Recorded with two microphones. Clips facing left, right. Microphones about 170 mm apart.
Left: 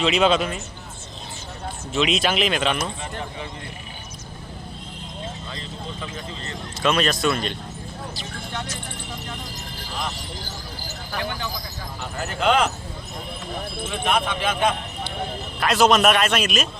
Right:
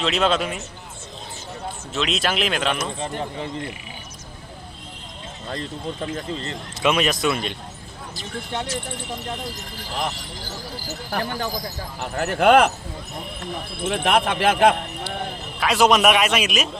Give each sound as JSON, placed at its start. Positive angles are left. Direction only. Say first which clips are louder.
{"t": 0.0, "sound": "speech", "louder": "left 2 dB", "side_deg": 0}
{"t": 1.9, "sound": "speech", "louder": "left 3 dB", "side_deg": 0}
{"t": 5.5, "sound": "speech", "louder": "right 5 dB", "side_deg": -50}
{"t": 6.8, "sound": "a man's voice", "louder": "right 1 dB", "side_deg": -15}
{"t": 8.5, "sound": "speech", "louder": "right 5 dB", "side_deg": -30}
{"t": 10.8, "sound": "speech", "louder": "right 2 dB", "side_deg": -40}
{"t": 12.1, "sound": "speech", "louder": "right 5 dB", "side_deg": -60}
{"t": 13.8, "sound": "speech", "louder": "right 4 dB", "side_deg": -65}
{"t": 15.6, "sound": "a man's voice", "louder": "even", "side_deg": -10}